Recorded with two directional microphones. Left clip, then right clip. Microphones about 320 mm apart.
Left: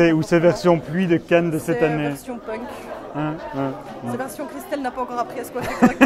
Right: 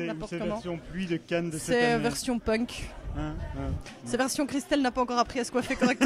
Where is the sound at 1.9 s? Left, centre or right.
Right.